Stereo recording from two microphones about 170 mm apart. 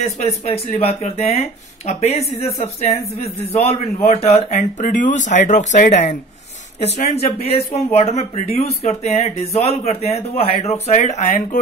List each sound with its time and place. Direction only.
0.0 s speech: 40° left (ahead or behind)